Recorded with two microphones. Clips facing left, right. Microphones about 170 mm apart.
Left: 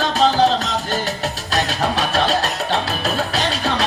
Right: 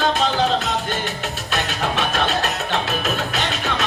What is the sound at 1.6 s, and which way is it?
Music, 35° left (ahead or behind).